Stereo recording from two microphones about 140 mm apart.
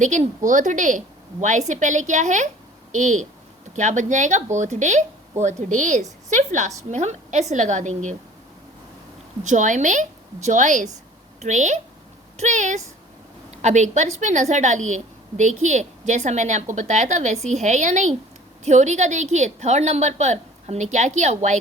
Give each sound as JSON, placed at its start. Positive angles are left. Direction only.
{"t": 0.0, "sound": "a woman's voice", "side_deg": -60}
{"t": 9.5, "sound": "a woman's voice", "side_deg": -65}